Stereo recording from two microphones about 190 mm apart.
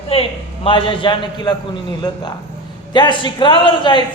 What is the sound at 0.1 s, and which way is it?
A man's voice, 30° left (ahead or behind).